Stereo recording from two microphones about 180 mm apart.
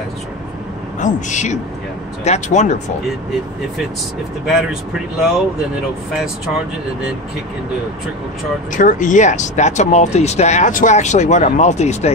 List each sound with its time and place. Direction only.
0.9 s speech: 40° left (ahead or behind)
4.5 s speech: centre (ahead or behind)
8.7 s speech: 45° left (ahead or behind)